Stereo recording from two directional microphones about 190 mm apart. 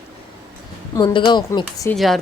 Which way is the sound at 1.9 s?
Centre (ahead or behind).